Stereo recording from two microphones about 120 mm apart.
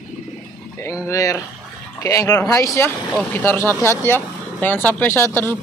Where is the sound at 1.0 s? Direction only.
25° left (ahead or behind).